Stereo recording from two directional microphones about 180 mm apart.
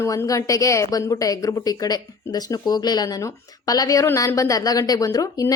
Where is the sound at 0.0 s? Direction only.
15° left (ahead or behind).